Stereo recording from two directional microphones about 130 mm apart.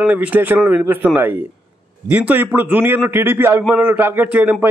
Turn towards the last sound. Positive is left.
turn(degrees=-15)  # may be behind; listen again after turning